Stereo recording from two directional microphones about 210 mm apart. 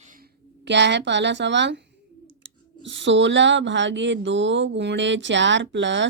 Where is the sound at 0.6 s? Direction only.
55° right (ahead or behind).